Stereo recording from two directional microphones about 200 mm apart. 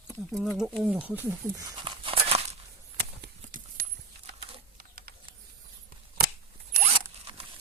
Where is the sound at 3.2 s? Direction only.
45° right (ahead or behind).